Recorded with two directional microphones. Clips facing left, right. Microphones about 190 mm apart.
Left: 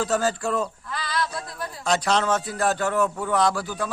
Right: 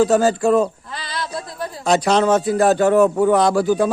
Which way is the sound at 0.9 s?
25° right (ahead or behind).